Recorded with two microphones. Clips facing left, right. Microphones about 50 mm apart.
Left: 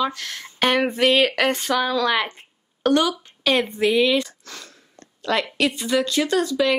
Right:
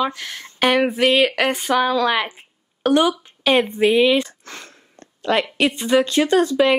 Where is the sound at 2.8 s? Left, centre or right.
Centre.